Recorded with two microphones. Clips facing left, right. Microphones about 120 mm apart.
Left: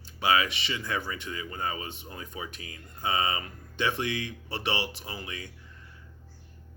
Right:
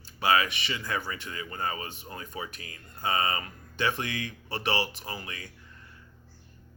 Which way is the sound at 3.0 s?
20° left (ahead or behind).